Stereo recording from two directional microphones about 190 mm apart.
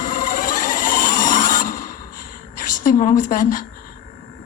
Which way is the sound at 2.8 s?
45° left (ahead or behind).